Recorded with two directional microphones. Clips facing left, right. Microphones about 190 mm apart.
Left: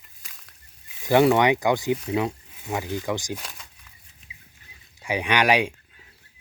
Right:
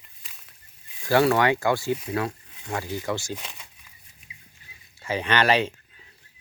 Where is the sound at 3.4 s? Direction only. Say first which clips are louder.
Even; 5° right (ahead or behind).